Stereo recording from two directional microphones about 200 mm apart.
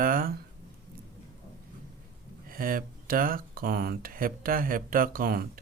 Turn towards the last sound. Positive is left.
turn(degrees=-50)  # may be behind; listen again after turning